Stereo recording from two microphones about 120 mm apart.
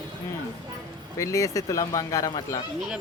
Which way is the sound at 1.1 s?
25° left (ahead or behind).